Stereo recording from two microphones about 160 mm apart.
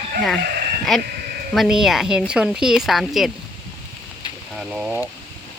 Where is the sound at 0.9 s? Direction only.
Centre (ahead or behind).